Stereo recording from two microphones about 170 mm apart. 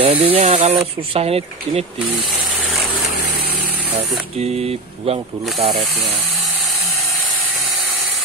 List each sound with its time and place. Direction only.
0.0 s speech: 30° right (ahead or behind)
0.5 s speech: 45° right (ahead or behind)
2.5 s a sound: centre (ahead or behind)
4.4 s speech: 35° right (ahead or behind)